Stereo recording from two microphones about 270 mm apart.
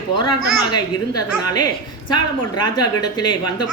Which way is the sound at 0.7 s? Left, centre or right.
Centre.